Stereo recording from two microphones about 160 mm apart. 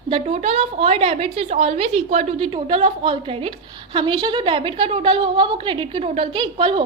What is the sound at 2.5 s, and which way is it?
A woman's voice, 35° right (ahead or behind).